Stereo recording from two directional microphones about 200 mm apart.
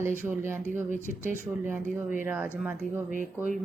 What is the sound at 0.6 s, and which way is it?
Speech, 40° right (ahead or behind).